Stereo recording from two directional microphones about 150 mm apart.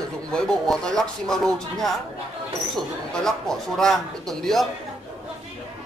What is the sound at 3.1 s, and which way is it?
Speech, 5° left (ahead or behind).